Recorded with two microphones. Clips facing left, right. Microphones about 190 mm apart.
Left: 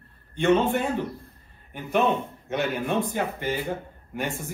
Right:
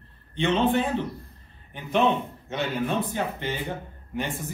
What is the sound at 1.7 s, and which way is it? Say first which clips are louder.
A man's voice: even; 10° left (ahead or behind).